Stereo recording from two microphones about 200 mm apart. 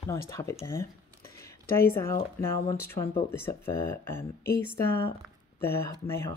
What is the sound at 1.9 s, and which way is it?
Speech, 10° left (ahead or behind).